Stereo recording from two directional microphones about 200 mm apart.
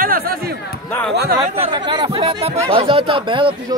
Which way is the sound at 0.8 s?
10° left (ahead or behind).